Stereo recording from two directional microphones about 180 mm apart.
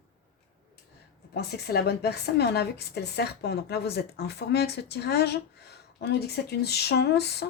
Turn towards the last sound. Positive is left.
turn(degrees=65)  # may be behind; listen again after turning